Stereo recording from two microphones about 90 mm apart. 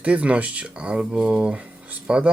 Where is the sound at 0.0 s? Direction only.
15° right (ahead or behind).